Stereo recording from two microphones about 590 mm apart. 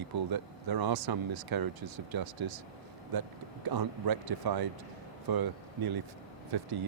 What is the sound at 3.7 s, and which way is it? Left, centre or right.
Speech, right.